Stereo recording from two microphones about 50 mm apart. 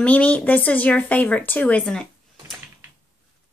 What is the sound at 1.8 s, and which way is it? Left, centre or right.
Speech, centre.